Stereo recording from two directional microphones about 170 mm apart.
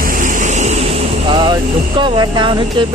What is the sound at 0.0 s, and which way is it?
Speech, 55° right (ahead or behind).